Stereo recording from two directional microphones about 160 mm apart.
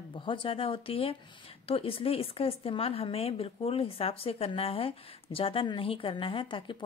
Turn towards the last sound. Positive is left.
turn(degrees=30)  # may be behind; listen again after turning